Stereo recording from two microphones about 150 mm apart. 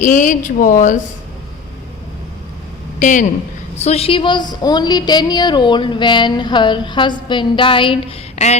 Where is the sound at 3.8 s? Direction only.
45° left (ahead or behind).